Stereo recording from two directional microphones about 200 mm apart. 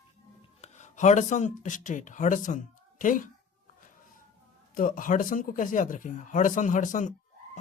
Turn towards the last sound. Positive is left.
turn(degrees=40)  # may be behind; listen again after turning